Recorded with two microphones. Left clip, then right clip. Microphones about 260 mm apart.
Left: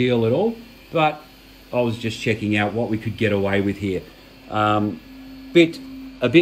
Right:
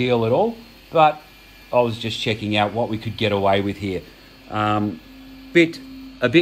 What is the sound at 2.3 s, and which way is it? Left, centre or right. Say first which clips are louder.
Speech: right 2 dB; centre.